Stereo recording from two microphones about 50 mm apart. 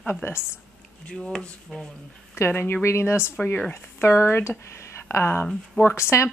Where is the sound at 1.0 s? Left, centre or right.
Centre.